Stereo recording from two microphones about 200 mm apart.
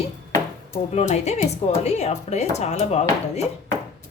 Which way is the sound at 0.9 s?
35° left (ahead or behind).